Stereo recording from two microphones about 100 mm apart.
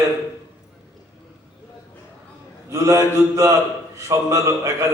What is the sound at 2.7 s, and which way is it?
A man's voice, 30° right (ahead or behind).